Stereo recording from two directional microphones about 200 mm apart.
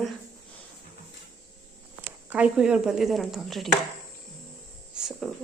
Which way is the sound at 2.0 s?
5° right (ahead or behind).